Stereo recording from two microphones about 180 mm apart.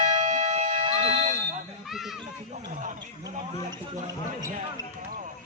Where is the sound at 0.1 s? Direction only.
40° right (ahead or behind).